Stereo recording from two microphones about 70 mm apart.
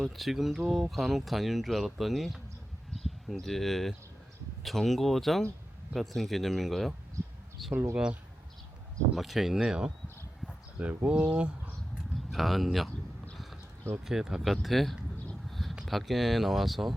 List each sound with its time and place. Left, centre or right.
0.0 s speech: centre
7.9 s speech: centre
12.1 s speech: centre
14.0 s speech: centre
15.4 s a sound: centre
15.9 s speech: centre